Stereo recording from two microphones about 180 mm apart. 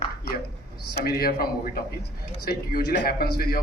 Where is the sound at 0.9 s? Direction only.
60° left (ahead or behind).